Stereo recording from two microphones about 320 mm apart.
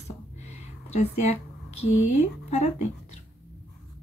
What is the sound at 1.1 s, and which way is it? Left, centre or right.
Speech, left.